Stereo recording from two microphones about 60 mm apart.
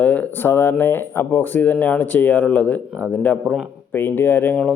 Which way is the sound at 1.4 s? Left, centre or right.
Left.